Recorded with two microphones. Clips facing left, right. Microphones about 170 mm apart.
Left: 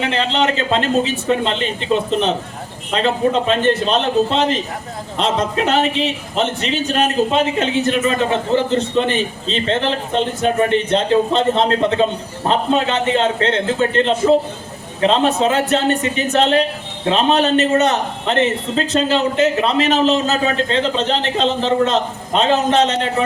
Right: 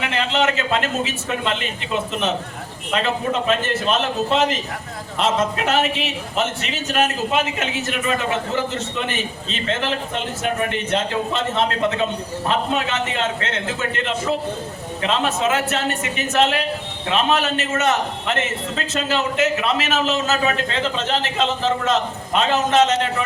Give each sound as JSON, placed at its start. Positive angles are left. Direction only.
{"t": 0.0, "sound": "a man's voice", "side_deg": 30}